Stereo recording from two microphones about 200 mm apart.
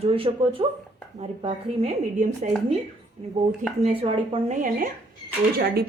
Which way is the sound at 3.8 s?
30° right (ahead or behind).